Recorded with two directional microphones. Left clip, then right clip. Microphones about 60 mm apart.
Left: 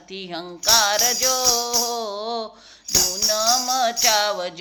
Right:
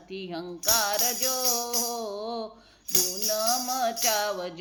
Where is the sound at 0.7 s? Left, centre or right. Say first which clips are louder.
Left 9 dB; centre.